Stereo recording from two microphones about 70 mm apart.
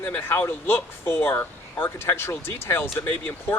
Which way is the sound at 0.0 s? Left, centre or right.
Left.